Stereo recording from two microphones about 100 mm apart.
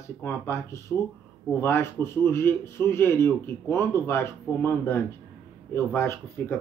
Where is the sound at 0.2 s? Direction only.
25° left (ahead or behind).